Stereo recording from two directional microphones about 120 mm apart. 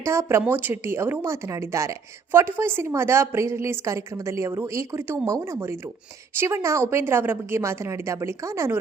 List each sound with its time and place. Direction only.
0.0 s a woman's voice: 25° right (ahead or behind)